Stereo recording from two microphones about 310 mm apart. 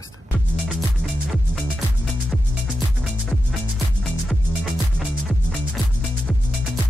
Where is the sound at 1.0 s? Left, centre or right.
Centre.